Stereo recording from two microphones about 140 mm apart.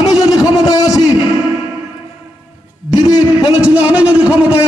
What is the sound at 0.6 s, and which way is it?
Speech, 25° left (ahead or behind).